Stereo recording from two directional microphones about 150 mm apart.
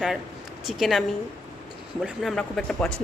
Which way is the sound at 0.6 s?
Centre (ahead or behind).